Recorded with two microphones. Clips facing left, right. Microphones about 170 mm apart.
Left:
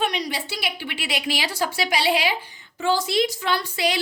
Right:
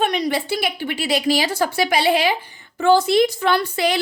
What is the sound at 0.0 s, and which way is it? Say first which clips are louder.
A woman's voice: right 6 dB; 50° right (ahead or behind).